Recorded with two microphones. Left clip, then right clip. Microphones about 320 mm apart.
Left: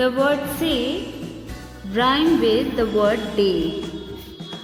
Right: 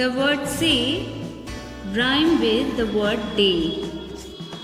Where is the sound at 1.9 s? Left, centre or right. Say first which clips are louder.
Left 2 dB; centre.